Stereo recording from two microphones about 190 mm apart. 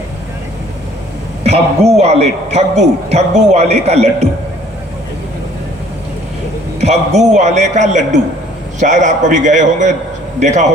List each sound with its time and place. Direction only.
1.5 s a man's voice: 35° right (ahead or behind)
6.7 s a man's voice: 35° right (ahead or behind)